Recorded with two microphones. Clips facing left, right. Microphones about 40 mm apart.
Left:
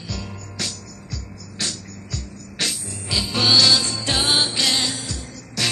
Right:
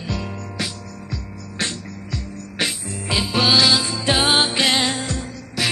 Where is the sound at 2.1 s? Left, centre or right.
Right.